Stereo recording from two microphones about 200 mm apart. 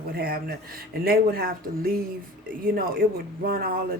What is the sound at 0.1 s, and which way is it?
Speech, 50° right (ahead or behind).